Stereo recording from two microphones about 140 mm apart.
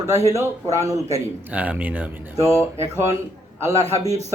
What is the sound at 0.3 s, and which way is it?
Speech, 20° right (ahead or behind).